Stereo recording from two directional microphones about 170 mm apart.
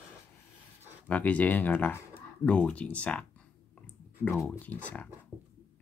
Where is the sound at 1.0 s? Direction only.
10° left (ahead or behind).